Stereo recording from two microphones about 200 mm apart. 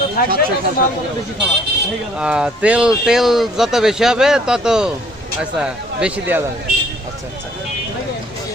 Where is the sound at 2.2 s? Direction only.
5° right (ahead or behind).